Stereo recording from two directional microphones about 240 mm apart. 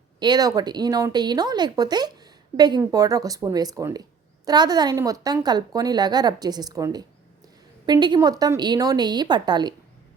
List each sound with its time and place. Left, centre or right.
0.2 s speech: centre